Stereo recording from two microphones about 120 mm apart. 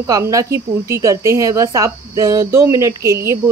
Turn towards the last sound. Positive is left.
turn(degrees=-25)  # may be behind; listen again after turning